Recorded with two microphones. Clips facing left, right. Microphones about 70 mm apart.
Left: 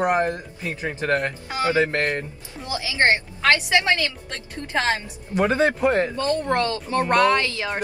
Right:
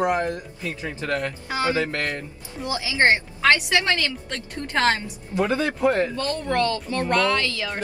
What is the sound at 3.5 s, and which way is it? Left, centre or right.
Speech, left.